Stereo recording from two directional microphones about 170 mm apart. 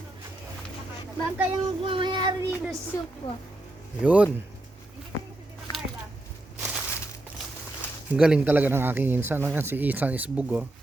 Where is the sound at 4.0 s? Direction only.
5° right (ahead or behind).